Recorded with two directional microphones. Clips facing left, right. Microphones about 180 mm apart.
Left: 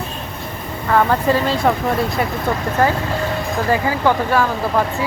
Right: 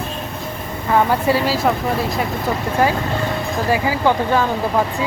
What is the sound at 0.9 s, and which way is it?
Speech, 15° right (ahead or behind).